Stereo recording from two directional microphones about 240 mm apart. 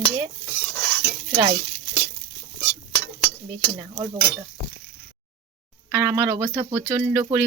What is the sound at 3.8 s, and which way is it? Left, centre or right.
Speech, centre.